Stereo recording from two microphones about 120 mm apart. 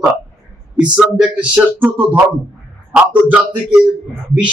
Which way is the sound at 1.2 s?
10° right (ahead or behind).